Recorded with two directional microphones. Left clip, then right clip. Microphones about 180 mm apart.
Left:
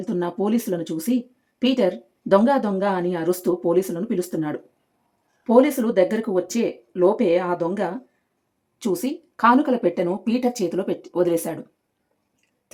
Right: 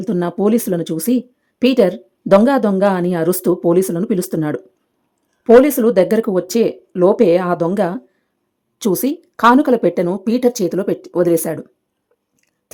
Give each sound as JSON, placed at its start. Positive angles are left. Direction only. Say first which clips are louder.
{"t": 0.0, "sound": "speech", "louder": "right 7 dB", "side_deg": -40}